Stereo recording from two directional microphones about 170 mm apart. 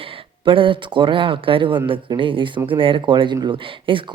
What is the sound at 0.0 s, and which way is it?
Speech, 30° right (ahead or behind).